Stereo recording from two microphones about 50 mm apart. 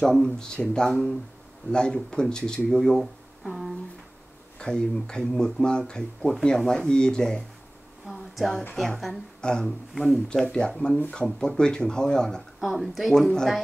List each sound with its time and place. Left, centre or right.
0.0 s speech: centre
3.4 s a sound: centre
4.6 s speech: centre
8.1 s speech: centre
9.4 s speech: centre
9.9 s speech: centre
10.2 s speech: centre
12.5 s speech: centre